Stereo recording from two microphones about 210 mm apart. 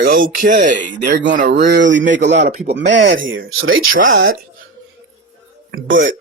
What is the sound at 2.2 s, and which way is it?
Speech, 55° right (ahead or behind).